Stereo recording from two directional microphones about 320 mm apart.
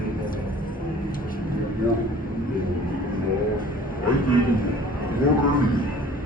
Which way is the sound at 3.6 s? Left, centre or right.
Left.